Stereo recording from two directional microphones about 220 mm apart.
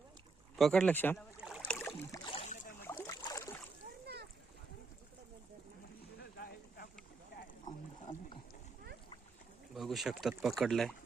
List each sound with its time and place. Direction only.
0.5 s speech: centre (ahead or behind)
1.4 s a sound: 5° right (ahead or behind)
2.2 s boat: 25° left (ahead or behind)
2.8 s boat: 10° left (ahead or behind)
4.0 s splash: 50° right (ahead or behind)
6.1 s a sound: 45° left (ahead or behind)
9.7 s speech: centre (ahead or behind)